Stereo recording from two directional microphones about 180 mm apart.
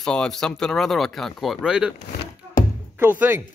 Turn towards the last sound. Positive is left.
turn(degrees=-10)  # may be behind; listen again after turning